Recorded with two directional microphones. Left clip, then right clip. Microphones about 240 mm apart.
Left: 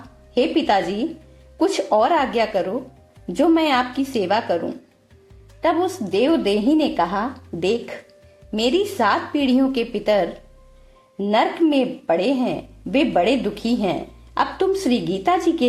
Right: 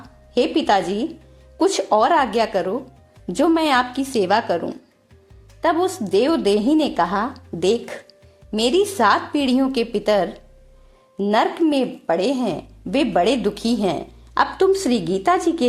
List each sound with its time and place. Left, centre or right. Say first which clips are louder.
0.3 s a woman's voice: right 1 dB; right